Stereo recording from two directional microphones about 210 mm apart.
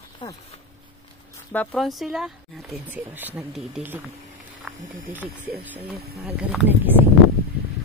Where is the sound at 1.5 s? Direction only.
Centre (ahead or behind).